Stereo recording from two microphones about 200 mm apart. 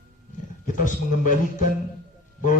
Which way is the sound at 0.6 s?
40° left (ahead or behind).